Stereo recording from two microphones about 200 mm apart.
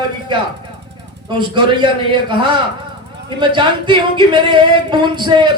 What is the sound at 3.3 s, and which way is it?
Speech, 25° right (ahead or behind).